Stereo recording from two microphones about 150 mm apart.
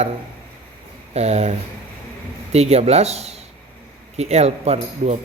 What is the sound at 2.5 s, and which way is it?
Speech, 45° right (ahead or behind).